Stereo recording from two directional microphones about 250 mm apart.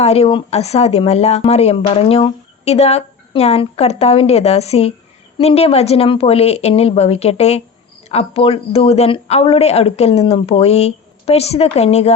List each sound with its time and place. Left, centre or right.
0.0 s speech: left